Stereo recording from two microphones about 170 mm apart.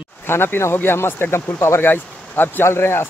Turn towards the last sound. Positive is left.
turn(degrees=15)  # may be behind; listen again after turning